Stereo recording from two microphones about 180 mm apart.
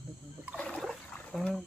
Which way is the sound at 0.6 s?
5° left (ahead or behind).